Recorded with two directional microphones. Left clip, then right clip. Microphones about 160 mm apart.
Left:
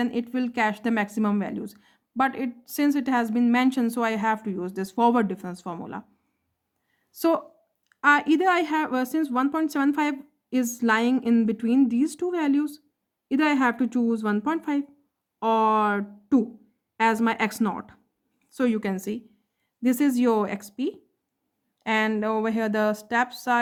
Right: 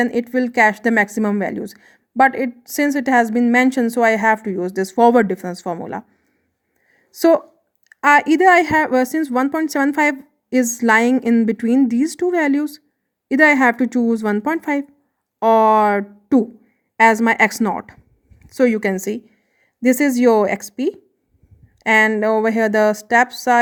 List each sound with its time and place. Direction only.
0.0 s speech: 35° right (ahead or behind)
7.1 s a woman's voice: 30° right (ahead or behind)